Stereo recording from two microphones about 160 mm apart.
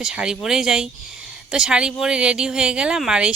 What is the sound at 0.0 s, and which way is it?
Speech, 5° right (ahead or behind).